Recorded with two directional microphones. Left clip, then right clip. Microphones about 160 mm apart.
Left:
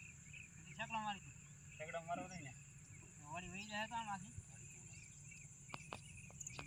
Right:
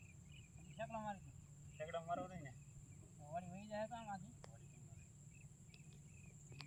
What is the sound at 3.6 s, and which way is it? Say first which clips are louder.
Speech: left 4 dB; 30° right (ahead or behind).